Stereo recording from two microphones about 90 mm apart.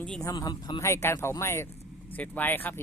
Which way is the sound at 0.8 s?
30° left (ahead or behind).